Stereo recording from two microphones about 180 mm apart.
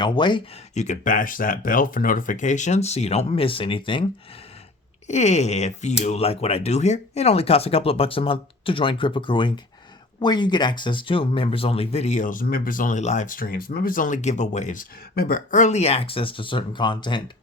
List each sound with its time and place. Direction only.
0.0 s speech: 25° left (ahead or behind)
0.7 s speech: 40° left (ahead or behind)
5.0 s speech: 40° left (ahead or behind)